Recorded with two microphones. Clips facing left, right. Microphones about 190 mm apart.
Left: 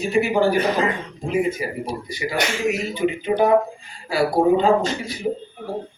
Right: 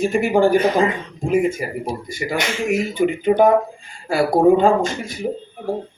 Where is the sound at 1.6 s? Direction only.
50° right (ahead or behind).